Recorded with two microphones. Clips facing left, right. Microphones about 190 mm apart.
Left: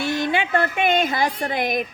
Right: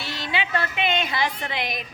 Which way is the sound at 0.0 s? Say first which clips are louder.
Left 7 dB; 50° left (ahead or behind).